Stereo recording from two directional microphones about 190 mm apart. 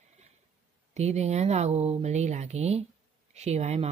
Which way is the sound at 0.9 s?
35° right (ahead or behind).